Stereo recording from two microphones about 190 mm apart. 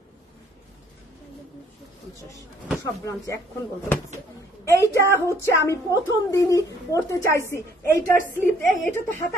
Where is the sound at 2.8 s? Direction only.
15° left (ahead or behind).